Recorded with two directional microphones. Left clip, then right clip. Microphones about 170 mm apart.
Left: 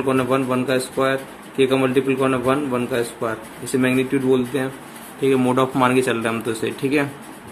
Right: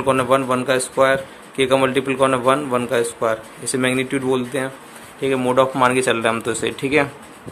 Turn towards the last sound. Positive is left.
turn(degrees=-30)  # may be behind; listen again after turning